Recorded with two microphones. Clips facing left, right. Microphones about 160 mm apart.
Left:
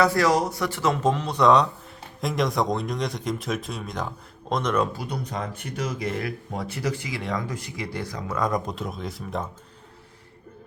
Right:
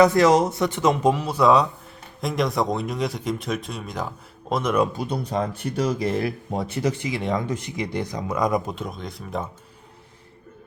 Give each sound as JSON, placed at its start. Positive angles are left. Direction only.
{"t": 0.0, "sound": "speech", "side_deg": -20}
{"t": 5.0, "sound": "speech", "side_deg": -30}
{"t": 8.7, "sound": "speech", "side_deg": 0}